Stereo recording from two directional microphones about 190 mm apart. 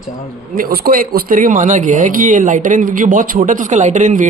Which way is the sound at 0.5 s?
50° right (ahead or behind).